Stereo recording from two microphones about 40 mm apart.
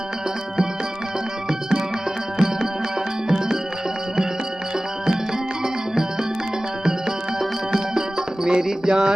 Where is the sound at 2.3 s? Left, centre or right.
Centre.